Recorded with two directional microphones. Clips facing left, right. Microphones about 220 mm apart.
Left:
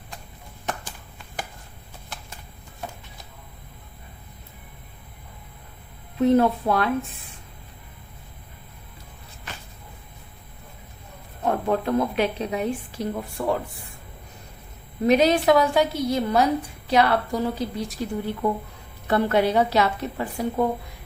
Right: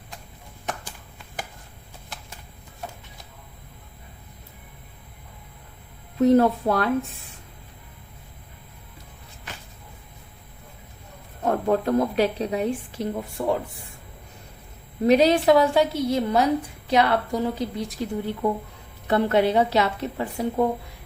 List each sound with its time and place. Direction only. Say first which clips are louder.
6.1 s a woman's voice: right 1 dB; 40° right (ahead or behind)
11.4 s a woman's voice: right 1 dB; 40° right (ahead or behind); by 13.6 s 20° right (ahead or behind)
15.0 s a woman's voice: right 1 dB; 30° right (ahead or behind)